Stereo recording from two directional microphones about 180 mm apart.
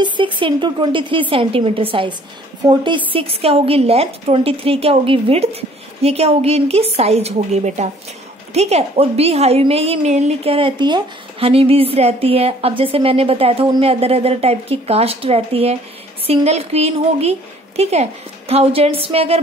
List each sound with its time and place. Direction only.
0.0 s a woman's voice: 25° right (ahead or behind)